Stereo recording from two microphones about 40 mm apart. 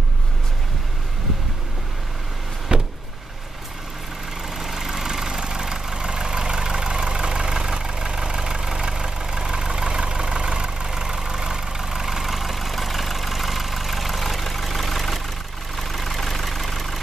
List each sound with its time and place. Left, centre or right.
2.7 s vehicle: right
4.6 s vehicle: centre